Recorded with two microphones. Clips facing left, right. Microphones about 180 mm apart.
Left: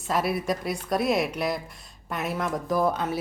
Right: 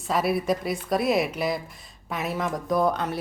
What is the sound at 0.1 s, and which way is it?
Speech, centre (ahead or behind).